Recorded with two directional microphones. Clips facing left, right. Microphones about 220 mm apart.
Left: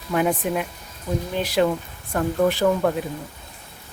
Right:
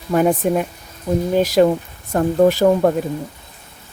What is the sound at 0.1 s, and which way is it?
Speech, 45° right (ahead or behind).